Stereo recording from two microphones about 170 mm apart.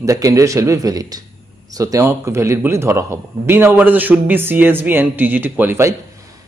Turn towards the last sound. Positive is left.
turn(degrees=-15)  # may be behind; listen again after turning